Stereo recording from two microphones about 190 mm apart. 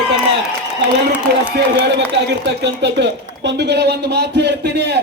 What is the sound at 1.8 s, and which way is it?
Speech, 65° right (ahead or behind).